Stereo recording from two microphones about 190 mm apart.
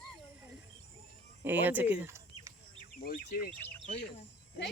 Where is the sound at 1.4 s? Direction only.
10° right (ahead or behind).